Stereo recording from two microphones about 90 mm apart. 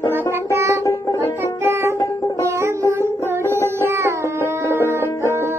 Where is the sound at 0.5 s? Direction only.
30° right (ahead or behind).